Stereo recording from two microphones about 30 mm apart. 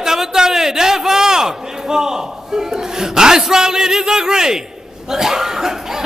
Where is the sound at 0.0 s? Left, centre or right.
Centre.